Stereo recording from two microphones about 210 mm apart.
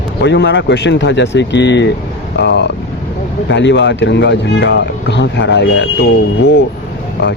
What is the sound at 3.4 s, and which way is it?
Speech, 60° left (ahead or behind).